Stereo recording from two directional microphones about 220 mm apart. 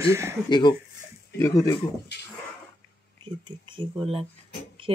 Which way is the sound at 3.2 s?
20° right (ahead or behind).